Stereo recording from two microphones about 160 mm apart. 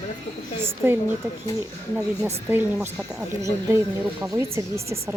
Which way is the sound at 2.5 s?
15° right (ahead or behind).